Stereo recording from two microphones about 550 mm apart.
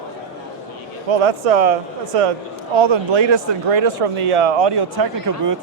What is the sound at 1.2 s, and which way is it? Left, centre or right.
Speech, right.